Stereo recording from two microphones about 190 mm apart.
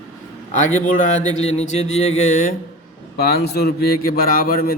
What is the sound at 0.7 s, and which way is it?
A man's voice, 40° left (ahead or behind).